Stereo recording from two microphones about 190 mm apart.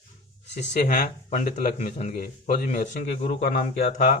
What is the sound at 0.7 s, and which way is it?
A man's voice, 40° left (ahead or behind).